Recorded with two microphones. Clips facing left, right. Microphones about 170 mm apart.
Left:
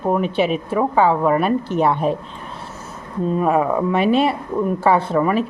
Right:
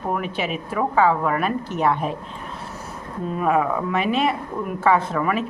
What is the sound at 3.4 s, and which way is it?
Speech, 30° left (ahead or behind).